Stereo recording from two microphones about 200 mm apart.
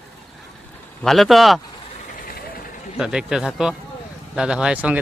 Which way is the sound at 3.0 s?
5° right (ahead or behind).